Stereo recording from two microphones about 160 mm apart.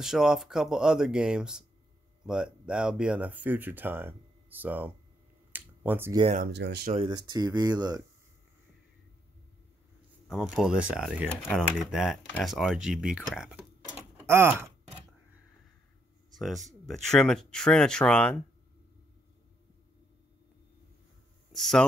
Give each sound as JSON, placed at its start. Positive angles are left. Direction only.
{"t": 0.0, "sound": "speech", "side_deg": -5}
{"t": 5.5, "sound": "a sound", "side_deg": -15}
{"t": 6.4, "sound": "speech", "side_deg": -90}
{"t": 7.1, "sound": "speech", "side_deg": -25}
{"t": 10.2, "sound": "speech", "side_deg": 0}
{"t": 16.3, "sound": "speech", "side_deg": 0}
{"t": 21.5, "sound": "speech", "side_deg": 5}